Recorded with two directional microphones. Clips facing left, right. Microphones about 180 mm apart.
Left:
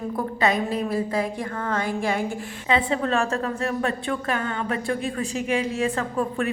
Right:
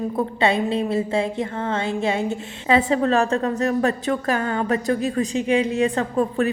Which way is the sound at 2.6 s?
40° right (ahead or behind).